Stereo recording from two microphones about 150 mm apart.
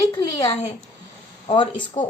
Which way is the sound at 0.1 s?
30° left (ahead or behind).